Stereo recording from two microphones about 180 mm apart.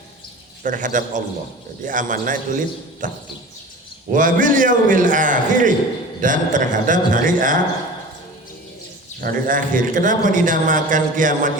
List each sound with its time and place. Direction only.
0.6 s a man's voice: 45° right (ahead or behind)
4.1 s a man's voice: 50° right (ahead or behind)
9.2 s a man's voice: 50° right (ahead or behind)